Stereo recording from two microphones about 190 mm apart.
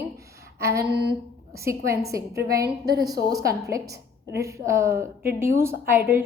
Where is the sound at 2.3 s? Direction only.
55° right (ahead or behind).